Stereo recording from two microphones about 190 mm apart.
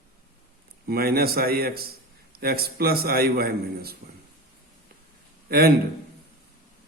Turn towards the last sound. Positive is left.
turn(degrees=-55)  # may be behind; listen again after turning